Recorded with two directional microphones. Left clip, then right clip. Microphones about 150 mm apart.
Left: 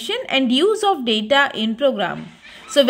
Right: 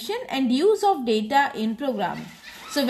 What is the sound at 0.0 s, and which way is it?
A woman's voice, 45° left (ahead or behind).